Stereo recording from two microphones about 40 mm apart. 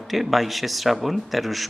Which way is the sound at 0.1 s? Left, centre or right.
Centre.